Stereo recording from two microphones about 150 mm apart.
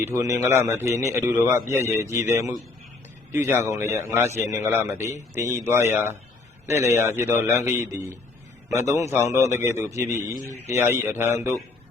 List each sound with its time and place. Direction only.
0.0 s a man's voice: 20° right (ahead or behind)
3.6 s a man's voice: 20° right (ahead or behind)